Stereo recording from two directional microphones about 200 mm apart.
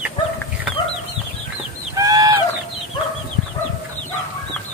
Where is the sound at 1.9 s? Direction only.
15° right (ahead or behind).